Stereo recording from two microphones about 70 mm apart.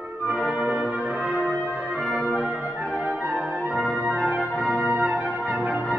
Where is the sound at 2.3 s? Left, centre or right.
Centre.